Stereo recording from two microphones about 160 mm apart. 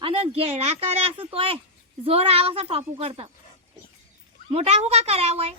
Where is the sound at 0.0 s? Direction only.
35° right (ahead or behind).